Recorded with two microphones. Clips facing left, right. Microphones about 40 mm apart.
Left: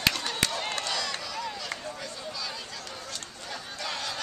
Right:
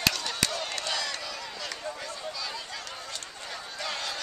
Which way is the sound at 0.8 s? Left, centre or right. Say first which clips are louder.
Even; centre.